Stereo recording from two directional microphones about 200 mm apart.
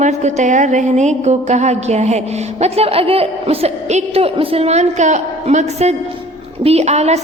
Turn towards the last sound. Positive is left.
turn(degrees=-35)  # may be behind; listen again after turning